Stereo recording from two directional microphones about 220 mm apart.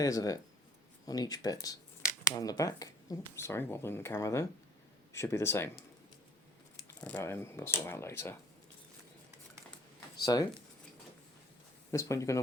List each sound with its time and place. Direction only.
0.0 s speech: 15° left (ahead or behind)
6.8 s speech: 10° left (ahead or behind)
10.3 s speech: 15° left (ahead or behind)
11.9 s speech: 15° left (ahead or behind)